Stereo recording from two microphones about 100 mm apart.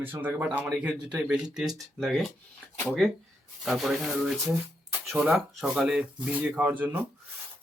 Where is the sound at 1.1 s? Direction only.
10° right (ahead or behind).